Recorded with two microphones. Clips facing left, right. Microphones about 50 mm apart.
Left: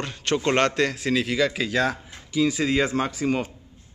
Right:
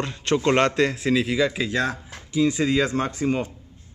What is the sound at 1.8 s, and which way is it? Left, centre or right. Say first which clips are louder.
Speech: left 3 dB; left.